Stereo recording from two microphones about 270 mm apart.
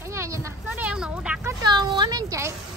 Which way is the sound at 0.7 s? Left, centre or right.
Centre.